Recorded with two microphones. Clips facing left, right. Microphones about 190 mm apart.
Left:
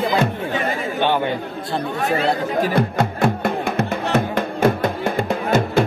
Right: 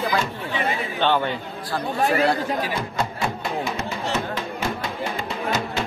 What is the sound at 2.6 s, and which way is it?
Music, 55° left (ahead or behind).